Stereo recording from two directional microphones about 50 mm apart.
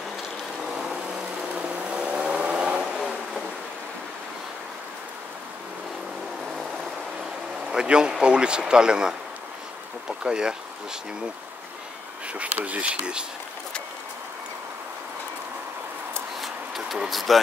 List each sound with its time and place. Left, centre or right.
1.5 s vehicle: centre
7.7 s speech: centre
12.4 s speech: right
16.3 s a sound: centre
17.1 s speech: centre